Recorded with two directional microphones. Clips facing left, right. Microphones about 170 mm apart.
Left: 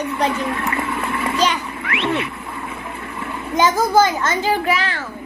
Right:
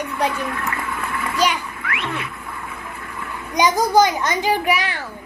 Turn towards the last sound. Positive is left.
turn(degrees=-15)  # may be behind; listen again after turning